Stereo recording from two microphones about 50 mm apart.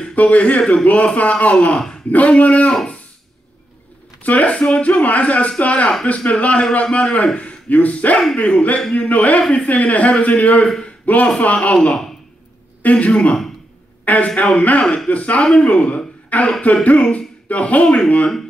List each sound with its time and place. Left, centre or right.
0.1 s speech: left
4.2 s speech: left
13.1 s speech: centre
14.0 s speech: left
15.6 s a sound: left
17.5 s speech: left